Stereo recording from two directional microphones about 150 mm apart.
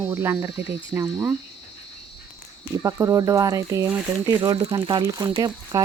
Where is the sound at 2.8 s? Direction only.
20° right (ahead or behind).